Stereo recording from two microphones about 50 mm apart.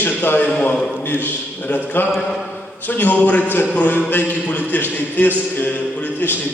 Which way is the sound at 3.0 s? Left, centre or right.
Left.